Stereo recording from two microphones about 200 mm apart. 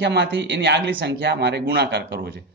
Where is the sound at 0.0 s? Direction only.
60° right (ahead or behind).